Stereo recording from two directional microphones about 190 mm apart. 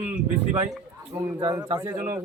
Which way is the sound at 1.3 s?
20° right (ahead or behind).